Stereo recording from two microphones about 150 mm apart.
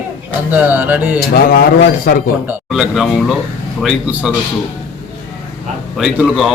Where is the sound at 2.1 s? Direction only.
90° left.